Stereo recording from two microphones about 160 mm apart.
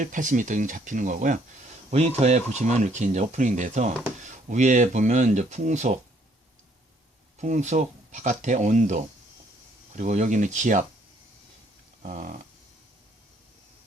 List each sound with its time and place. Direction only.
0.0 s speech: 55° right (ahead or behind)
1.9 s speech: 45° right (ahead or behind)
7.3 s speech: 50° right (ahead or behind)
12.0 s snoring: 55° right (ahead or behind)